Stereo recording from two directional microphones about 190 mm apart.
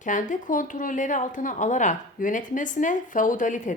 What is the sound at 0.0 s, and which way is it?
Speech, 40° left (ahead or behind).